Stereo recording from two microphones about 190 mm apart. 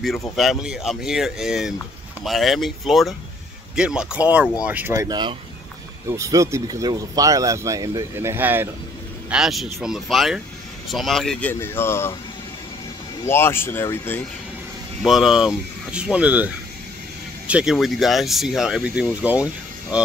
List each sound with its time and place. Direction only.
0.4 s speech: centre (ahead or behind)
11.6 s speech: 10° left (ahead or behind)
13.2 s speech: 10° left (ahead or behind)
15.0 s speech: centre (ahead or behind)